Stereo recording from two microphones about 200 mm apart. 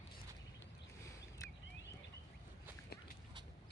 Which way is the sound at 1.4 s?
15° left (ahead or behind).